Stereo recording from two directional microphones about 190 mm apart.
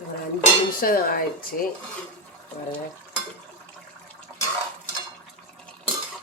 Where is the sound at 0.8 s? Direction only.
50° left (ahead or behind).